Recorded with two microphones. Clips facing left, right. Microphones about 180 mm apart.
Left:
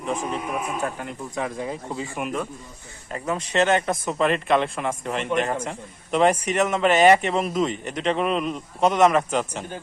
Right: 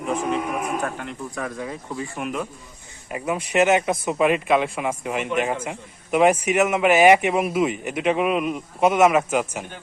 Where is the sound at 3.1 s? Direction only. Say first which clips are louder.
Right 2 dB; 10° right (ahead or behind).